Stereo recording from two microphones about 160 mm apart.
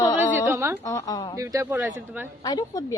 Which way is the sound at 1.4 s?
20° right (ahead or behind).